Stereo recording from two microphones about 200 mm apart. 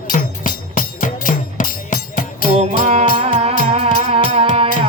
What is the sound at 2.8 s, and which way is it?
Music, 30° right (ahead or behind).